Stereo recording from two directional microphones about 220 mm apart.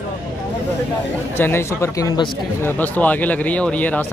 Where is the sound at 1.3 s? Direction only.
10° left (ahead or behind).